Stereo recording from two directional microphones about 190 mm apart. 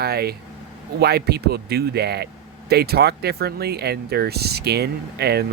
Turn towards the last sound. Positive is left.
turn(degrees=-60)  # may be behind; listen again after turning